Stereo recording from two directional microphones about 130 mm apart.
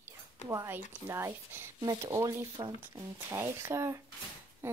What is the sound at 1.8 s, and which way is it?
A woman's voice, 30° right (ahead or behind).